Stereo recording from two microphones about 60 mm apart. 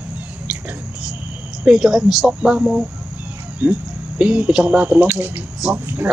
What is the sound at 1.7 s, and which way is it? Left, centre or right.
Speech, centre.